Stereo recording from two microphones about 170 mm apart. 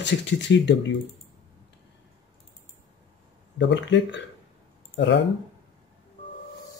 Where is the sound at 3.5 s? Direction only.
90° left.